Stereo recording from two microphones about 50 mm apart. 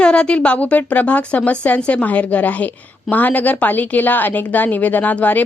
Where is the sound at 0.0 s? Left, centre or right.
Centre.